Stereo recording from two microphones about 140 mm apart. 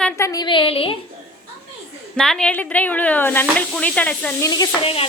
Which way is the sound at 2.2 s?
5° left (ahead or behind).